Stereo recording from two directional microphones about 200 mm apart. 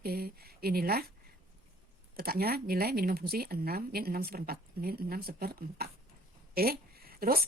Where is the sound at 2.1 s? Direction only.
50° right (ahead or behind).